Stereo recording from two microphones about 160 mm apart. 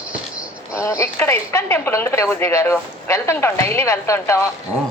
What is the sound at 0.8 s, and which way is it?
Speech, 20° left (ahead or behind).